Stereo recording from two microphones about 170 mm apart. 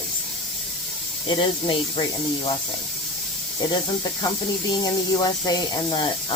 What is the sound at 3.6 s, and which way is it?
Speech, 20° left (ahead or behind).